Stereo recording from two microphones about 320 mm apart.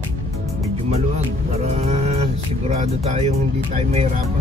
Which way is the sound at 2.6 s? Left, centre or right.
Centre.